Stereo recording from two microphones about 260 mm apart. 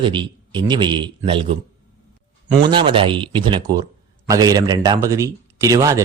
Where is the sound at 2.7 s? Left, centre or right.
Centre.